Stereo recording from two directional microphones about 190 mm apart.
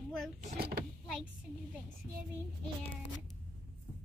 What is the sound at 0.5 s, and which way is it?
Speech, 55° right (ahead or behind).